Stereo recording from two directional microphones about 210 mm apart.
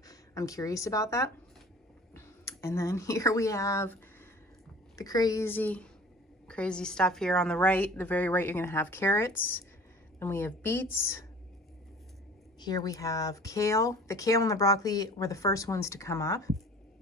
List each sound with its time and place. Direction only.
0.1 s speech: 15° left (ahead or behind)
12.5 s speech: 20° left (ahead or behind)